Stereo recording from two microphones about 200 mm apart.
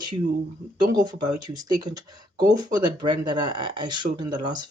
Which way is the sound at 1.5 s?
20° right (ahead or behind).